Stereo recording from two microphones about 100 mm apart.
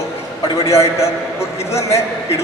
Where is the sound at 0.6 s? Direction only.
30° left (ahead or behind).